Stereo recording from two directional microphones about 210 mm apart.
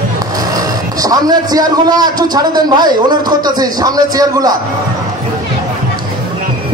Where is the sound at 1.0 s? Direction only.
20° right (ahead or behind).